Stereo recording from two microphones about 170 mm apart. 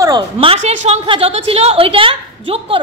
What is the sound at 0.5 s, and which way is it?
A woman's voice, 40° right (ahead or behind).